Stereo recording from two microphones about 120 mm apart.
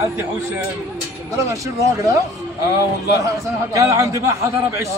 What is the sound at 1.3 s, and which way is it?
Speech, 25° right (ahead or behind).